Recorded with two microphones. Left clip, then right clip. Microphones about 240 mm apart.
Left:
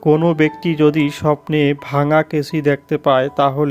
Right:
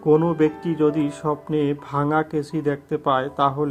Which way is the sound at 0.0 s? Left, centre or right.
Left.